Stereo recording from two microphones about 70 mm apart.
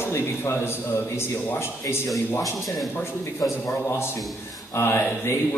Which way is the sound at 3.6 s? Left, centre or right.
Left.